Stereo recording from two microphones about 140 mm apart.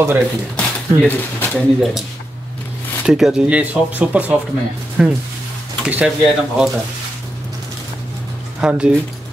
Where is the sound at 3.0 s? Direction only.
5° right (ahead or behind).